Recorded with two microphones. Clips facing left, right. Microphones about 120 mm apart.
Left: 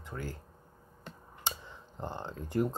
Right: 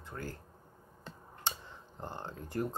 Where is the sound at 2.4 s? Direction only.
20° left (ahead or behind).